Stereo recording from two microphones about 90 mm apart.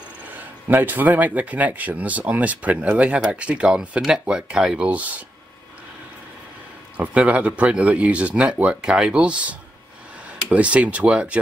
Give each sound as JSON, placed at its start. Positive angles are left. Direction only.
{"t": 0.4, "sound": "speech", "side_deg": -20}
{"t": 7.0, "sound": "speech", "side_deg": -15}